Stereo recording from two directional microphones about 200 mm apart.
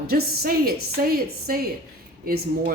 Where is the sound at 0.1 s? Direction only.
50° right (ahead or behind).